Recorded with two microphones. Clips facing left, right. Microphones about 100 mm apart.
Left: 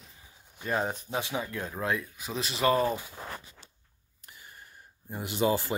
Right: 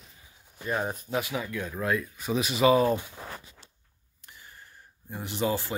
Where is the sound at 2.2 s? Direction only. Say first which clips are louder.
Right 5 dB; 5° right (ahead or behind).